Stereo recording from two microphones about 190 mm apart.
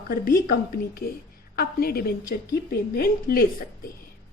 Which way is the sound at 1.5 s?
50° left (ahead or behind).